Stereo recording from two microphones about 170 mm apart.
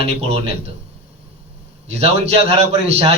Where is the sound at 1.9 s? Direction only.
40° right (ahead or behind).